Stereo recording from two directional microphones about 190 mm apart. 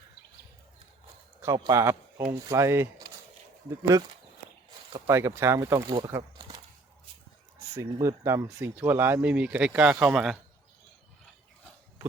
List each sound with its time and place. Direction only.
1.4 s speech: 20° right (ahead or behind)
7.8 s speech: 15° right (ahead or behind)